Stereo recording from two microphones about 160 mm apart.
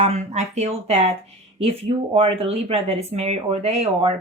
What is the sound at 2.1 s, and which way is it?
Speech, 35° right (ahead or behind).